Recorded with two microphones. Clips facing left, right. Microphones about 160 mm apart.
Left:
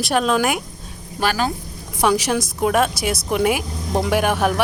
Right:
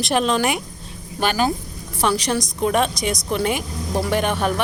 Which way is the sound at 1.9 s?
10° left (ahead or behind).